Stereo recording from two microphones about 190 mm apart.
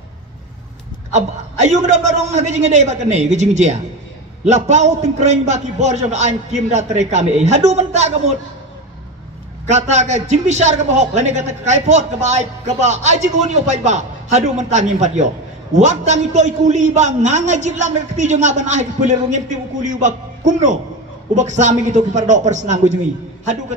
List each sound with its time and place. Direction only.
1.1 s a man's voice: 35° right (ahead or behind)
9.7 s a man's voice: 35° right (ahead or behind)